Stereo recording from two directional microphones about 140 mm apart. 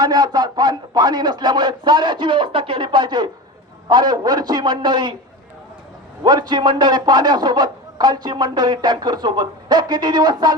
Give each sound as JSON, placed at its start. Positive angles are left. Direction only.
{"t": 0.0, "sound": "speech", "side_deg": -30}
{"t": 6.2, "sound": "speech", "side_deg": -30}